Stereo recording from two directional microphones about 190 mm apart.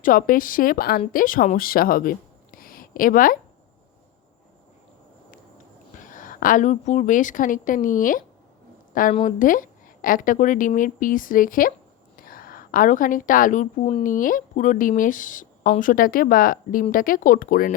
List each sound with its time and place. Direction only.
0.0 s speech: 45° left (ahead or behind)
6.0 s a woman's voice: 45° left (ahead or behind)